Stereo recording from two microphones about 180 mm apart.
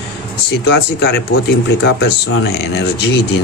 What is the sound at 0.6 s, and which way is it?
Speech, 65° left (ahead or behind).